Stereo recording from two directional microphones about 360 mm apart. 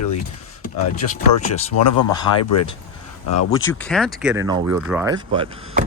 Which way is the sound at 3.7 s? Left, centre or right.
Centre.